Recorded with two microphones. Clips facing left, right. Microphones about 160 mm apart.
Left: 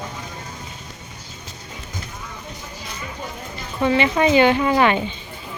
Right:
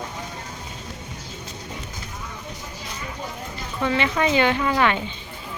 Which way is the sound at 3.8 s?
10° left (ahead or behind).